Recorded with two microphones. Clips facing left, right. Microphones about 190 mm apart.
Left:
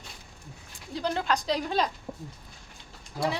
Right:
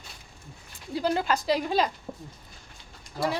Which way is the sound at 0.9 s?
5° right (ahead or behind).